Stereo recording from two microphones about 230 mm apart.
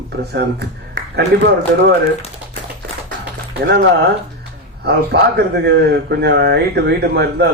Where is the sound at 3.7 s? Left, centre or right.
Right.